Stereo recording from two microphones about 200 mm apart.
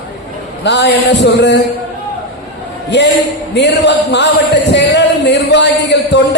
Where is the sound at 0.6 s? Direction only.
60° left (ahead or behind).